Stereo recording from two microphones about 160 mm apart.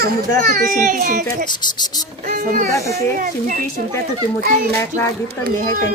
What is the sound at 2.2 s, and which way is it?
Speech, 55° right (ahead or behind).